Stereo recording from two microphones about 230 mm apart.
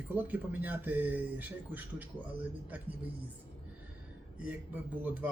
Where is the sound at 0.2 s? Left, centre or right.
Centre.